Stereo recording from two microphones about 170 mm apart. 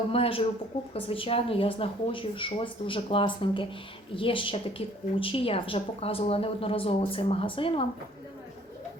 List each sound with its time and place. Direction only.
0.1 s a woman's voice: 35° left (ahead or behind)